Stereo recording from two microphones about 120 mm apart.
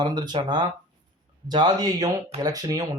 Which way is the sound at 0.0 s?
40° right (ahead or behind).